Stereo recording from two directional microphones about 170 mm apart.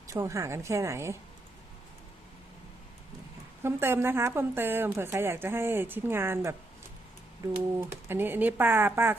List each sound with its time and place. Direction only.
0.1 s a woman's voice: 20° right (ahead or behind)
3.6 s a woman's voice: 15° right (ahead or behind)
7.8 s a woman's voice: 15° right (ahead or behind)